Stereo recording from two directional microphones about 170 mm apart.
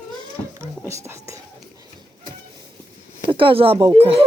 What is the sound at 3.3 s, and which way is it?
Speech, 30° right (ahead or behind).